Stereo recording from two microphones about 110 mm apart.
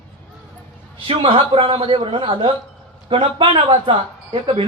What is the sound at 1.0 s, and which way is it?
Speech, 55° right (ahead or behind).